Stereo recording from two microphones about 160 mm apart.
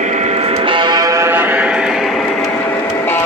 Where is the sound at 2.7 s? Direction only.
15° left (ahead or behind).